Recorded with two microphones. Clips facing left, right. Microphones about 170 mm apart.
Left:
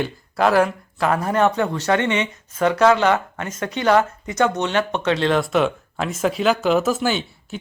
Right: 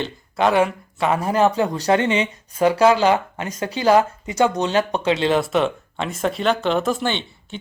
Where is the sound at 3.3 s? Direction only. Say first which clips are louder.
Even; 30° right (ahead or behind).